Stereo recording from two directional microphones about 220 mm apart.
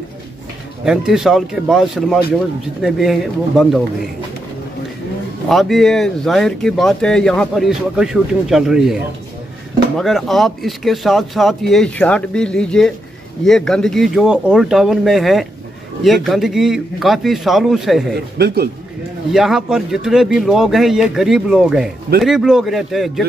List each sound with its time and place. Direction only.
0.8 s speech: centre (ahead or behind)
5.5 s speech: centre (ahead or behind)
9.9 s speech: centre (ahead or behind)
18.4 s a man's voice: 45° right (ahead or behind)
19.3 s speech: centre (ahead or behind)